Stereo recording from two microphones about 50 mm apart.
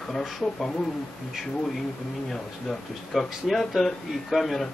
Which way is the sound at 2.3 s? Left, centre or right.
Centre.